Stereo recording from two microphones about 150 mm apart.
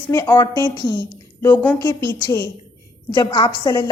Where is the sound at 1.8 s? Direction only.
25° left (ahead or behind).